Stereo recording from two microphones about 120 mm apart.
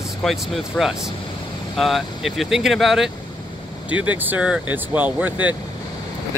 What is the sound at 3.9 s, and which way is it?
Speech, 10° right (ahead or behind).